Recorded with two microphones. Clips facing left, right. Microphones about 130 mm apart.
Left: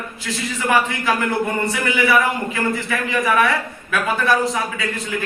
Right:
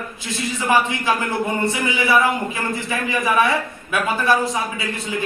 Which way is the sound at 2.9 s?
20° right (ahead or behind).